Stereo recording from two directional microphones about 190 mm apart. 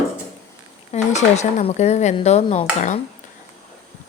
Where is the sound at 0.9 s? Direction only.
35° left (ahead or behind).